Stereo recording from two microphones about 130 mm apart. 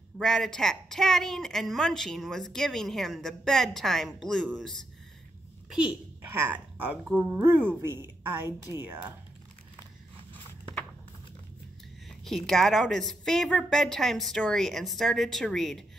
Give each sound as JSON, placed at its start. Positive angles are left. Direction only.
{"t": 0.2, "sound": "a woman's voice", "side_deg": 5}
{"t": 5.7, "sound": "a woman's voice", "side_deg": -5}
{"t": 8.5, "sound": "speech", "side_deg": 30}
{"t": 8.8, "sound": "speech", "side_deg": -15}
{"t": 12.3, "sound": "a woman's voice", "side_deg": 0}